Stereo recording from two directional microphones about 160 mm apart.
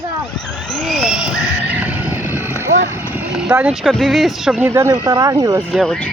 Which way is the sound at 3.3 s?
5° right (ahead or behind).